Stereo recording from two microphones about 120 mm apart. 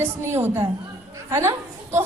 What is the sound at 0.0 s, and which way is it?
A woman's voice, 20° right (ahead or behind).